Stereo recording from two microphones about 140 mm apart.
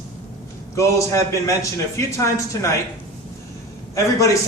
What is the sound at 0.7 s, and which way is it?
A man's voice, 20° left (ahead or behind).